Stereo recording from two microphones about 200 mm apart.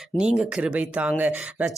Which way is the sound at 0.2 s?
5° right (ahead or behind).